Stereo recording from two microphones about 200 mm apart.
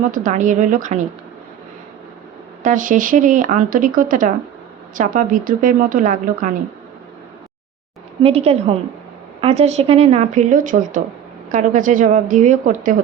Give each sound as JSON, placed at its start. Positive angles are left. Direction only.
{"t": 0.1, "sound": "speech", "side_deg": -40}
{"t": 2.6, "sound": "a woman's voice", "side_deg": -40}
{"t": 8.2, "sound": "speech", "side_deg": -30}